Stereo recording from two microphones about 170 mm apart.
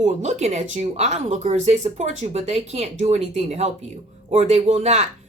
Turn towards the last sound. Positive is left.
turn(degrees=-40)  # may be behind; listen again after turning